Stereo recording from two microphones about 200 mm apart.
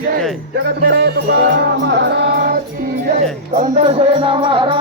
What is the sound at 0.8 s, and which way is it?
Mantra, 50° right (ahead or behind).